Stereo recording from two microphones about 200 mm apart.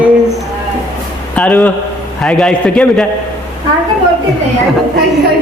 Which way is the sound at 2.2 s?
5° left (ahead or behind).